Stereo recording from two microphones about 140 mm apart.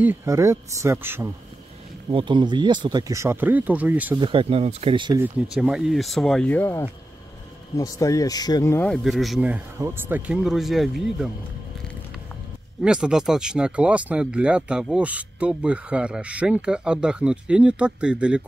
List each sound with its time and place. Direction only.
0.0 s speech: 15° right (ahead or behind)
2.0 s speech: 35° right (ahead or behind); by 4.2 s 10° right (ahead or behind)
4.2 s speech: 40° right (ahead or behind)
4.9 s speech: 35° right (ahead or behind)
5.5 s speech: 5° right (ahead or behind); by 8.8 s 25° left (ahead or behind)
8.8 s speech: centre (ahead or behind)
9.8 s speech: 15° right (ahead or behind)
12.8 s speech: 5° right (ahead or behind)